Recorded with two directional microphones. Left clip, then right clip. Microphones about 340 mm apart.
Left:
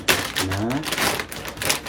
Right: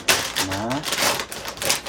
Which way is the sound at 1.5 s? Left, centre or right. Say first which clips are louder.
Even; centre.